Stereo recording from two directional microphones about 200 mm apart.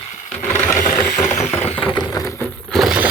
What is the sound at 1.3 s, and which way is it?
Engine, 35° left (ahead or behind).